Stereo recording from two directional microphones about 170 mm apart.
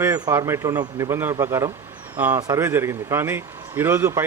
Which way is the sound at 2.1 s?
10° right (ahead or behind).